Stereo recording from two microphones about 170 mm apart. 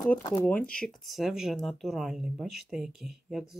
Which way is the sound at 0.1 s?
10° left (ahead or behind).